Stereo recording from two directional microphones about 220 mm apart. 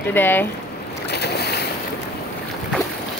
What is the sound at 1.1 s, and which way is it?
Boat, 50° left (ahead or behind).